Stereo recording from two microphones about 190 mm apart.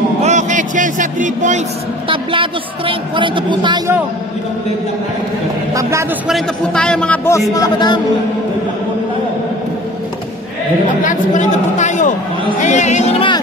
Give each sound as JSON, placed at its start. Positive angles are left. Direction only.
{"t": 0.2, "sound": "a sound", "side_deg": -40}
{"t": 2.0, "sound": "a woman's voice", "side_deg": -25}
{"t": 5.8, "sound": "a man's voice", "side_deg": -15}
{"t": 6.2, "sound": "a man's voice", "side_deg": 0}
{"t": 7.5, "sound": "a man's voice", "side_deg": 20}
{"t": 11.1, "sound": "a man's voice", "side_deg": 40}